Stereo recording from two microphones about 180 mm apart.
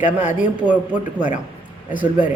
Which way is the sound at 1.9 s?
50° left (ahead or behind).